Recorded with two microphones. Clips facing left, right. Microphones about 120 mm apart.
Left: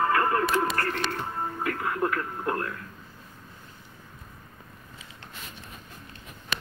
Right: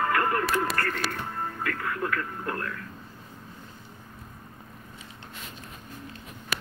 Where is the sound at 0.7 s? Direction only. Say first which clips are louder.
Left 1 dB; 20° left (ahead or behind).